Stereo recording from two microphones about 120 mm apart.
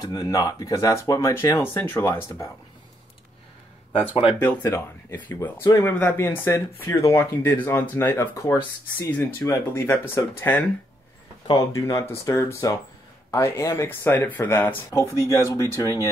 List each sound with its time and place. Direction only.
0.0 s speech: 30° left (ahead or behind)
4.4 s speech: 15° left (ahead or behind)
11.4 s speech: 30° left (ahead or behind)